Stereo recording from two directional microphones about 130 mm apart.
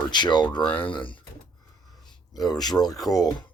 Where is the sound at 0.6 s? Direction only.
15° left (ahead or behind).